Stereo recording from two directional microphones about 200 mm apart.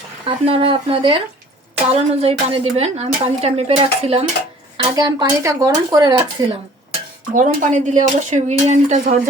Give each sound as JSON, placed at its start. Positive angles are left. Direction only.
{"t": 0.3, "sound": "a woman's voice", "side_deg": -30}
{"t": 7.3, "sound": "a woman's voice", "side_deg": -40}